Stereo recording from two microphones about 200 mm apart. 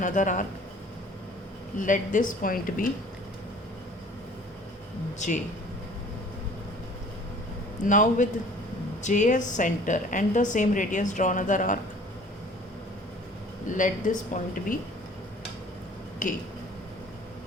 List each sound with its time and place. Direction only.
0.0 s a woman's voice: 40° left (ahead or behind)
1.8 s speech: 40° left (ahead or behind)
5.2 s a woman's voice: 35° left (ahead or behind)
7.9 s a woman's voice: 40° left (ahead or behind)
13.7 s a woman's voice: 40° left (ahead or behind)
16.2 s speech: 45° left (ahead or behind)